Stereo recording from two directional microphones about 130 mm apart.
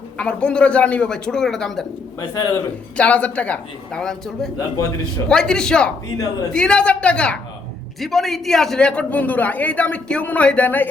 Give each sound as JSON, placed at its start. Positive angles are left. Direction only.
{"t": 0.2, "sound": "speech", "side_deg": 10}
{"t": 2.3, "sound": "a man's voice", "side_deg": 25}
{"t": 3.0, "sound": "a man's voice", "side_deg": 10}